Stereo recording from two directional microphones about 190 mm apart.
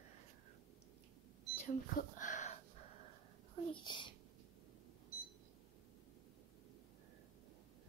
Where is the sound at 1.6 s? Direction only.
40° left (ahead or behind).